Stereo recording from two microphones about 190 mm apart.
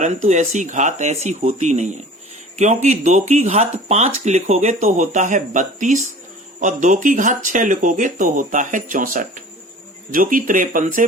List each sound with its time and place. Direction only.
0.0 s speech: 40° right (ahead or behind)